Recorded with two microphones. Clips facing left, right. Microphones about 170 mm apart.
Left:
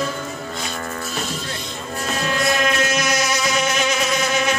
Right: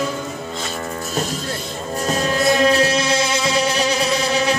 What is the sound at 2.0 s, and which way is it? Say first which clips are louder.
Music: right 4 dB; 35° right (ahead or behind).